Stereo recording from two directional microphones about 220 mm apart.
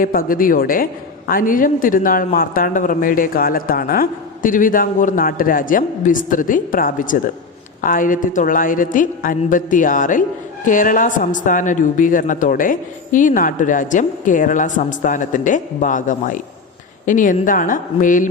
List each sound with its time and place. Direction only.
0.0 s speech: 40° left (ahead or behind)